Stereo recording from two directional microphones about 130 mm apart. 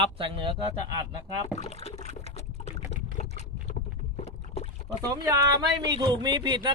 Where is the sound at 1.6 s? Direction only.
55° left (ahead or behind).